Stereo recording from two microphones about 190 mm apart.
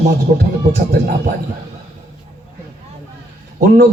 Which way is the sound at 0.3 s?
45° right (ahead or behind).